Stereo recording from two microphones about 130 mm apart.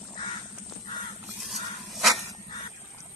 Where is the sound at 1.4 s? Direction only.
Centre (ahead or behind).